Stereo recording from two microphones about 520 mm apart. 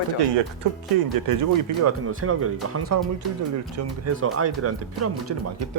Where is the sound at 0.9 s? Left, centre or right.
Right.